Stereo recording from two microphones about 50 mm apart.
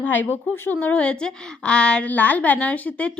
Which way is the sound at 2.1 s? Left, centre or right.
Left.